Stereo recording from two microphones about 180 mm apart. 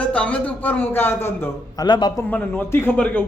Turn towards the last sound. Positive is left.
turn(degrees=5)  # may be behind; listen again after turning